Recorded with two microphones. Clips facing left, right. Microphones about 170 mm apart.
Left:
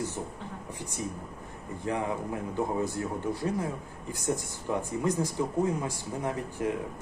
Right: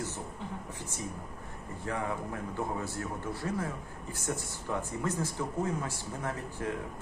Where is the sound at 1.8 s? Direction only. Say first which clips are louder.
Left 4 dB; 20° left (ahead or behind).